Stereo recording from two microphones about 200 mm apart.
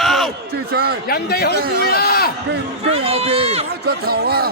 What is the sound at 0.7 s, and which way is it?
Speech, 50° right (ahead or behind).